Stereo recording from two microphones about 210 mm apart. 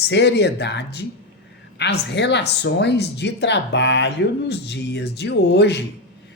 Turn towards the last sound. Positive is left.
turn(degrees=55)  # may be behind; listen again after turning